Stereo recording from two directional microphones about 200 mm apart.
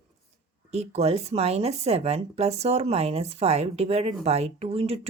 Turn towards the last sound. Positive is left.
turn(degrees=-30)  # may be behind; listen again after turning